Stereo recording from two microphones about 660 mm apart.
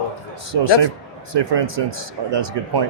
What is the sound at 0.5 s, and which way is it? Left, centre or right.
Speech, right.